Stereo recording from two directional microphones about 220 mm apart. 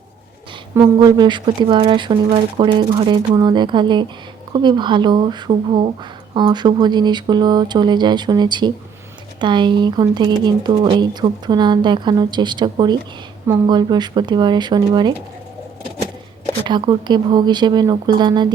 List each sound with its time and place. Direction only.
0.7 s speech: 20° right (ahead or behind)
16.6 s speech: 20° right (ahead or behind)